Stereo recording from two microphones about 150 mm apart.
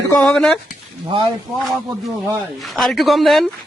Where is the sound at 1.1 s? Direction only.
35° right (ahead or behind).